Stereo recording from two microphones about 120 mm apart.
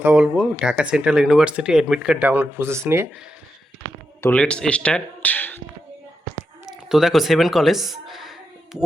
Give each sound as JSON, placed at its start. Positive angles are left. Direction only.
{"t": 0.0, "sound": "speech", "side_deg": -10}
{"t": 4.2, "sound": "speech", "side_deg": 10}
{"t": 6.7, "sound": "a sound", "side_deg": -5}